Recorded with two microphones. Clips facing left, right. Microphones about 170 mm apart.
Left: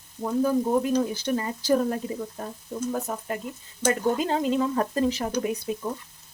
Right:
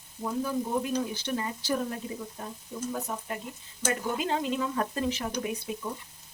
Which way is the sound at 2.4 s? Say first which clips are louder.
Left 4 dB; 45° left (ahead or behind).